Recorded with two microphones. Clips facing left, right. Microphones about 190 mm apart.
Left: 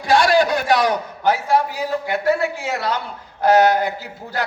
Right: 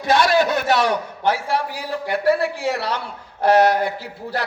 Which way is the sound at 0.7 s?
30° right (ahead or behind).